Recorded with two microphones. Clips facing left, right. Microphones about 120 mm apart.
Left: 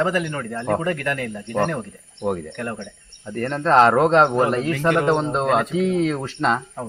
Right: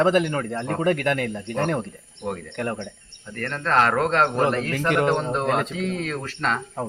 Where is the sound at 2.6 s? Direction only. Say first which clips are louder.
Right 1 dB; 25° right (ahead or behind).